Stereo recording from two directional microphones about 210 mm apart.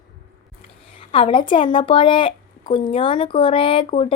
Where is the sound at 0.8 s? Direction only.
25° left (ahead or behind).